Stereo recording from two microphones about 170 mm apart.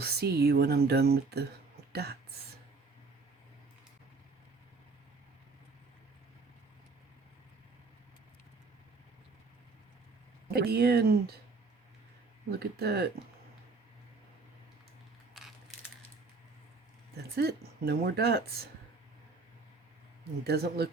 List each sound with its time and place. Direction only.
0.0 s speech: 70° right (ahead or behind)
10.5 s speech: 65° right (ahead or behind)
12.5 s speech: 70° right (ahead or behind)
17.3 s speech: 65° right (ahead or behind)
20.5 s speech: 65° right (ahead or behind)